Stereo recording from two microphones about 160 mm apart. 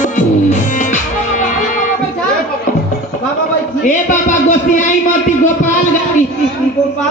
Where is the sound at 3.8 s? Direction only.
50° left (ahead or behind).